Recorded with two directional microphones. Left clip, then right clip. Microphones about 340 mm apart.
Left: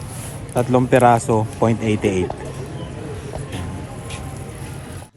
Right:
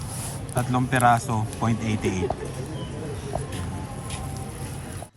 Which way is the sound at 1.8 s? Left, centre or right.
Right.